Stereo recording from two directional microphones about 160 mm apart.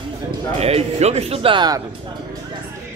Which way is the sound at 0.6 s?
40° right (ahead or behind).